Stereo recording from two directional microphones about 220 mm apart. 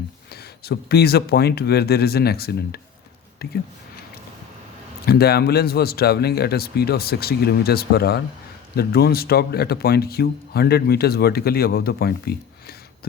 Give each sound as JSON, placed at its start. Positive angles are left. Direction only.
{"t": 0.6, "sound": "speech", "side_deg": 45}
{"t": 5.0, "sound": "speech", "side_deg": 45}